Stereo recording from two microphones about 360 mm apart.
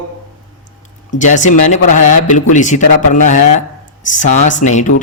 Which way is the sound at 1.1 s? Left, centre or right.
Left.